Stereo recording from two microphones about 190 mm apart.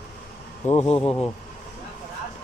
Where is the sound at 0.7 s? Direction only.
30° left (ahead or behind).